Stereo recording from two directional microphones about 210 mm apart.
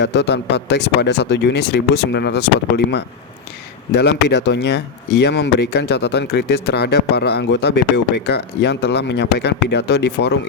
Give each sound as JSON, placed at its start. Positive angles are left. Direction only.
{"t": 0.0, "sound": "speech", "side_deg": 55}